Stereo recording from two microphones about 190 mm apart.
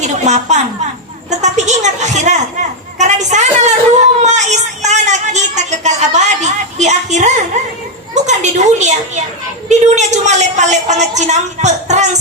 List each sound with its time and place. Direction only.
0.3 s a woman's voice: 40° right (ahead or behind)